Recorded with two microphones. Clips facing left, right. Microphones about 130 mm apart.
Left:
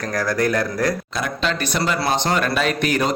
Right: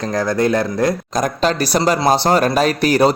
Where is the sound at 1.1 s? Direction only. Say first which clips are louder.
Right 6 dB; 40° right (ahead or behind).